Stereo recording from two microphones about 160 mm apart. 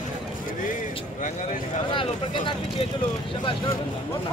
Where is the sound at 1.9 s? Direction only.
30° left (ahead or behind).